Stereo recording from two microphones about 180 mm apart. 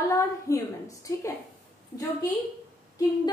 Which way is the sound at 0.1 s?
15° left (ahead or behind).